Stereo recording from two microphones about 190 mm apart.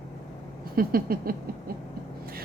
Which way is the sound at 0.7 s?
50° right (ahead or behind).